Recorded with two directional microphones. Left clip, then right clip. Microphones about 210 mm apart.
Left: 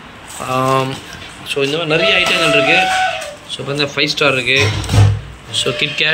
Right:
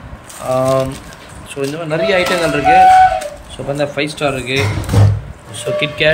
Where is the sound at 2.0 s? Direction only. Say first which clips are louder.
Even; 20° left (ahead or behind).